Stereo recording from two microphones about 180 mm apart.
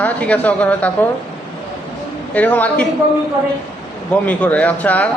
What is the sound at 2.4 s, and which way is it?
Speech, 10° left (ahead or behind).